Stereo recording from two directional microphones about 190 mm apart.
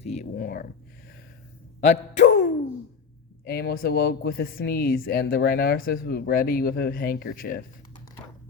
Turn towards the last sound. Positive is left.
turn(degrees=55)  # may be behind; listen again after turning